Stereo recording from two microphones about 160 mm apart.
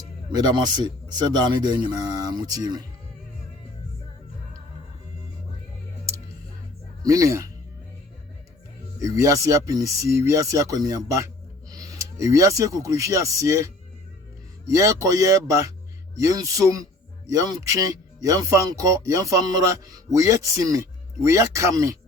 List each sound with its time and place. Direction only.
0.3 s speech: 25° right (ahead or behind)
7.0 s speech: 20° right (ahead or behind)
9.0 s speech: 20° right (ahead or behind)
14.7 s speech: 20° right (ahead or behind)